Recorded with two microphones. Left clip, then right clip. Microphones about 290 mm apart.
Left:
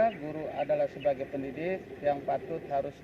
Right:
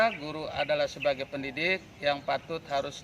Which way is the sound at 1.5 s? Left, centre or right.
Right.